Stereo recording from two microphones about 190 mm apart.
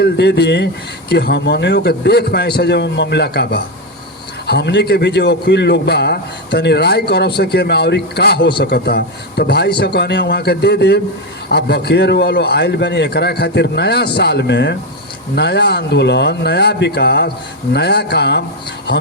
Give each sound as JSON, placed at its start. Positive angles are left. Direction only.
{"t": 0.0, "sound": "a man's voice", "side_deg": 60}